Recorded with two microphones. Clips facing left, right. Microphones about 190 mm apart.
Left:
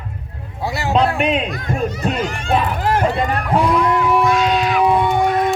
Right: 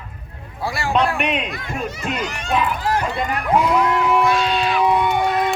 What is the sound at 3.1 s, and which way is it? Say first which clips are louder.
Speech: left 1 dB; 35° left (ahead or behind).